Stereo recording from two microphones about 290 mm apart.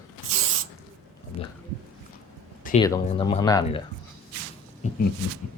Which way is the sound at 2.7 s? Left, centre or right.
Left.